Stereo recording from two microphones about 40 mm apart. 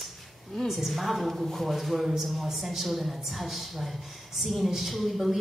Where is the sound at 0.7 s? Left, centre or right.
Centre.